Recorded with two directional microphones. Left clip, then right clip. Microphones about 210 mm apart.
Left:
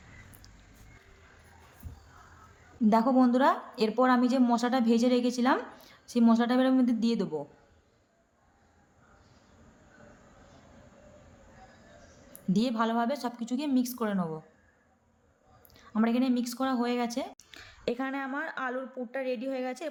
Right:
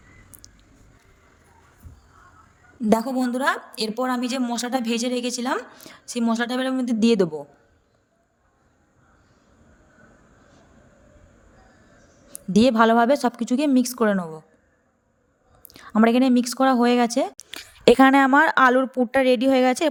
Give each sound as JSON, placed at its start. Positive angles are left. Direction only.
{"t": 0.4, "sound": "music", "side_deg": -35}
{"t": 2.9, "sound": "a woman's voice", "side_deg": -45}
{"t": 12.5, "sound": "a woman's voice", "side_deg": -40}
{"t": 15.6, "sound": "a woman's voice", "side_deg": -40}